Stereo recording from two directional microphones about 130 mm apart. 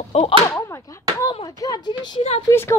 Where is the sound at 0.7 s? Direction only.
20° left (ahead or behind).